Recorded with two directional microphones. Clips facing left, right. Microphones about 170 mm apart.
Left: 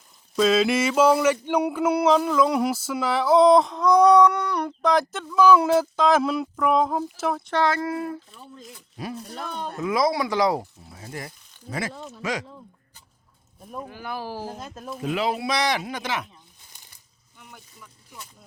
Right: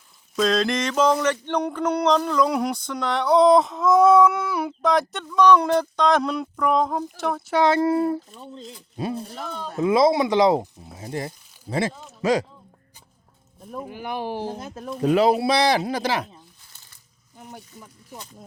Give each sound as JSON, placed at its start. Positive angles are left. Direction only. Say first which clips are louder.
{"t": 0.3, "sound": "a sound", "louder": "left 2 dB", "side_deg": 5}
{"t": 7.5, "sound": "speech", "louder": "right 4 dB", "side_deg": -20}
{"t": 7.8, "sound": "speech", "louder": "right 8 dB", "side_deg": -30}
{"t": 9.5, "sound": "speech", "louder": "left 1 dB", "side_deg": 60}
{"t": 9.8, "sound": "speech", "louder": "right 5 dB", "side_deg": -25}
{"t": 13.8, "sound": "speech", "louder": "right 5 dB", "side_deg": -20}
{"t": 14.6, "sound": "a sound", "louder": "right 3 dB", "side_deg": 0}
{"t": 15.0, "sound": "speech", "louder": "right 8 dB", "side_deg": -40}